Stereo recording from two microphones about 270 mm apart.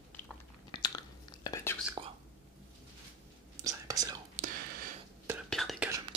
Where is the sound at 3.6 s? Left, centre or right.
Centre.